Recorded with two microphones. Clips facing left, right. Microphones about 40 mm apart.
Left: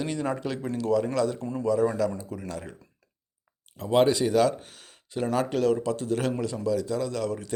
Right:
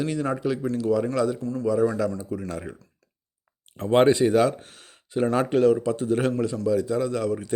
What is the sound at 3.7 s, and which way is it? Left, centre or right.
Speech, right.